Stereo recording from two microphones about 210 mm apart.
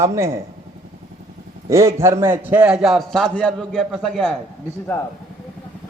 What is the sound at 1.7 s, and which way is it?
A man's voice, 15° right (ahead or behind).